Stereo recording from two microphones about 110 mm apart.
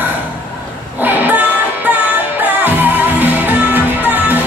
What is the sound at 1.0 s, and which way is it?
Vehicle, 15° right (ahead or behind).